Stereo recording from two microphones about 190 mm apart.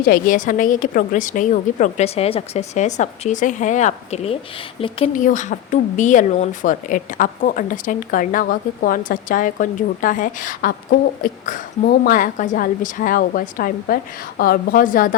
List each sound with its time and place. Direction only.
0.0 s a woman's voice: 50° left (ahead or behind); by 5.1 s 30° left (ahead or behind)
5.1 s speech: 40° left (ahead or behind)